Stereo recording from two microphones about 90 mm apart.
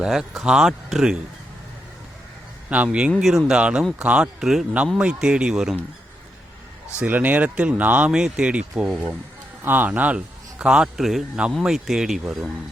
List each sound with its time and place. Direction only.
0.0 s speech: 5° right (ahead or behind)
2.6 s speech: 15° right (ahead or behind)
3.2 s speech: 5° right (ahead or behind)
7.0 s speech: 20° right (ahead or behind)
9.6 s speech: 20° right (ahead or behind); by 12.2 s 5° right (ahead or behind)